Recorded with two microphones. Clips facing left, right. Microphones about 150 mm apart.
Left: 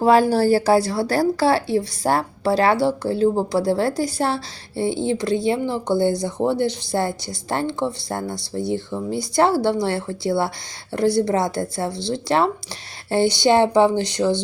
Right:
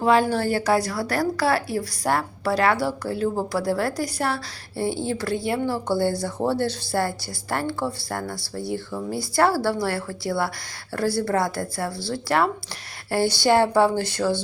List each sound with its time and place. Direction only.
0.0 s a woman's voice: 40° left (ahead or behind); by 14.4 s 20° left (ahead or behind)